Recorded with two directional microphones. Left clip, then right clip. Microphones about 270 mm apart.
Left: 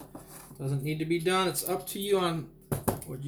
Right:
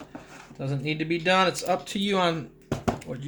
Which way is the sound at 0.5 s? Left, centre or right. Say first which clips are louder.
Right 5 dB; right.